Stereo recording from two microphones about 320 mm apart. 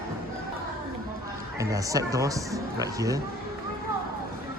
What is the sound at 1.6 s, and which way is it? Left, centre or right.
Speech, centre.